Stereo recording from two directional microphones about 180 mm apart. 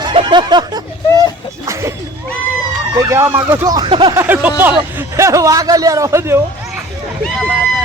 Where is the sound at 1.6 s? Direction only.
15° right (ahead or behind).